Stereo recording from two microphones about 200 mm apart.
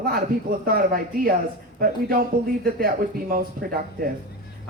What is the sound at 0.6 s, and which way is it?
A man's voice, 50° right (ahead or behind).